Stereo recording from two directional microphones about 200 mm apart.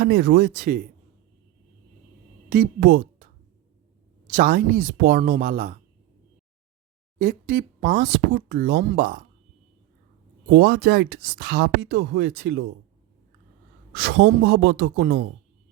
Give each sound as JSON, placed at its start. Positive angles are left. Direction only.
{"t": 0.0, "sound": "speech", "side_deg": -50}
{"t": 2.5, "sound": "speech", "side_deg": -55}
{"t": 4.3, "sound": "speech", "side_deg": -45}
{"t": 7.2, "sound": "speech", "side_deg": -45}
{"t": 10.5, "sound": "speech", "side_deg": -55}
{"t": 14.0, "sound": "speech", "side_deg": -55}